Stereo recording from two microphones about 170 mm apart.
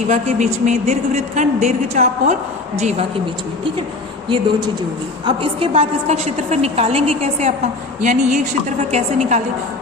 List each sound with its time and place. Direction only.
0.1 s speech: 45° right (ahead or behind)
5.2 s a woman's voice: 30° right (ahead or behind)